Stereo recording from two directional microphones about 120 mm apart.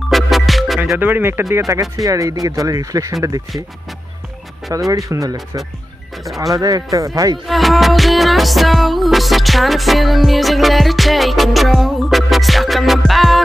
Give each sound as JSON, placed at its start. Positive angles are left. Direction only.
{"t": 0.1, "sound": "music", "side_deg": 0}
{"t": 0.9, "sound": "speech", "side_deg": -15}
{"t": 4.7, "sound": "speech", "side_deg": -30}
{"t": 6.2, "sound": "music", "side_deg": 0}
{"t": 6.5, "sound": "speech", "side_deg": -30}
{"t": 7.4, "sound": "music", "side_deg": 0}